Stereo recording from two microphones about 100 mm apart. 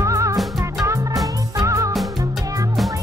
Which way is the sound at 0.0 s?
35° right (ahead or behind).